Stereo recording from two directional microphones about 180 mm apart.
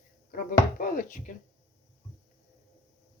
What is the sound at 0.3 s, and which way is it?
Speech, 50° left (ahead or behind).